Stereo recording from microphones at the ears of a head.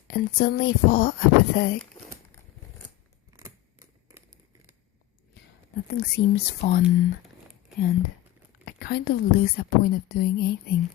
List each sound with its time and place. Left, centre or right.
0.1 s a woman's voice: left
5.3 s a woman's voice: left